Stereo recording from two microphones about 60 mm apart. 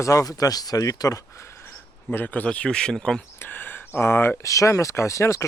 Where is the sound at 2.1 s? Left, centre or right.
Left.